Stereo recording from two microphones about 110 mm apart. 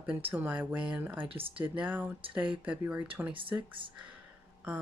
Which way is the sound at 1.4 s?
55° right (ahead or behind).